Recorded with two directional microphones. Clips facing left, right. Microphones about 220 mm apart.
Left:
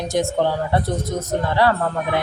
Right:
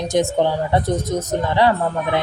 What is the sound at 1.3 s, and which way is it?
Speech, 20° right (ahead or behind).